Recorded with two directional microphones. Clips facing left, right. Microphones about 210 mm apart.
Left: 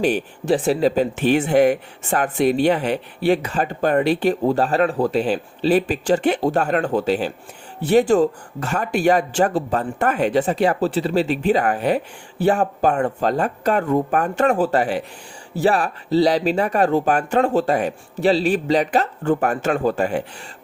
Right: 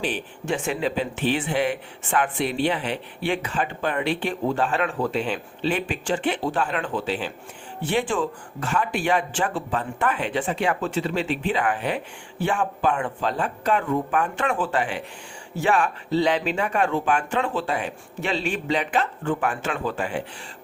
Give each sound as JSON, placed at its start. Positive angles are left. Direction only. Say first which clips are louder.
{"t": 0.0, "sound": "speech", "louder": "left 8 dB", "side_deg": 40}